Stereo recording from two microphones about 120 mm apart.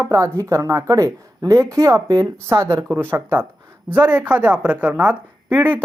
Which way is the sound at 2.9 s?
15° right (ahead or behind).